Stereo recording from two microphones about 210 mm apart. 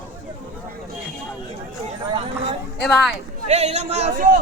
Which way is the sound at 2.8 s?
Centre (ahead or behind).